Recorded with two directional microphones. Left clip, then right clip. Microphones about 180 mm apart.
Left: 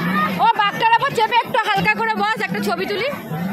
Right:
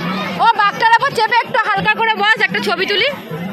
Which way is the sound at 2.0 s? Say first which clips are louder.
Right 6 dB; 5° right (ahead or behind).